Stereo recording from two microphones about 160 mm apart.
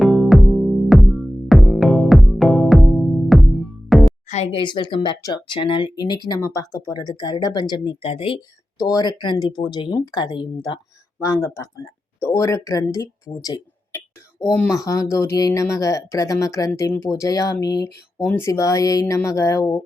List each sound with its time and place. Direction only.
0.0 s music: centre (ahead or behind)
4.3 s speech: 40° left (ahead or behind)
8.8 s speech: 25° left (ahead or behind)